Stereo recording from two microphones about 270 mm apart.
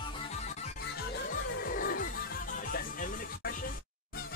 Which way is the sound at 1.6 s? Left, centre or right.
Left.